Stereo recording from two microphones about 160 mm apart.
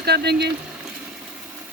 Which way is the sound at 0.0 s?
90° right.